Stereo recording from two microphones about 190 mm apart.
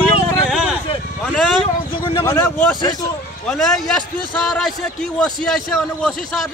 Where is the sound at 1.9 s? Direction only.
25° left (ahead or behind).